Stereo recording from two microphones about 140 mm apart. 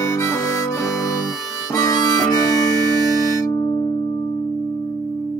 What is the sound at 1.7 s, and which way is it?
Harmonica, 25° left (ahead or behind).